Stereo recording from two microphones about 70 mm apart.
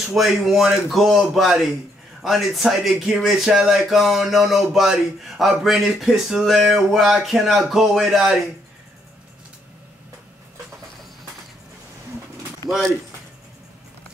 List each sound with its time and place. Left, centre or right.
0.1 s speech: centre